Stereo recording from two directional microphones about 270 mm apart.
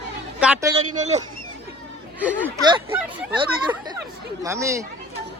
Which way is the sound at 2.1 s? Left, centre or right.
Centre.